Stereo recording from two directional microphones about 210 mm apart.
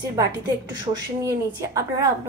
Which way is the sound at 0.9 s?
15° right (ahead or behind).